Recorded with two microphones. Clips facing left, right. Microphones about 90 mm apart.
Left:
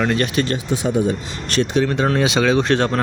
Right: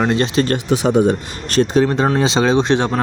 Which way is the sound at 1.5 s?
40° right (ahead or behind).